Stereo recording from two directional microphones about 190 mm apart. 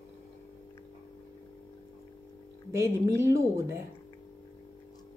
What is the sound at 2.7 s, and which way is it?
A woman's voice, 15° right (ahead or behind).